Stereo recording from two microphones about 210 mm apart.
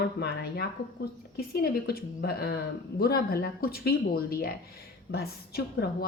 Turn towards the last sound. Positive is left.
turn(degrees=50)  # may be behind; listen again after turning